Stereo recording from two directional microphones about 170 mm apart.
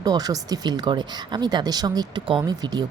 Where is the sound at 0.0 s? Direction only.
20° right (ahead or behind).